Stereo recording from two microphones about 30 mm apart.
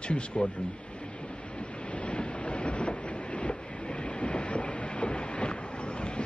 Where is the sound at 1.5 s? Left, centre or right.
Left.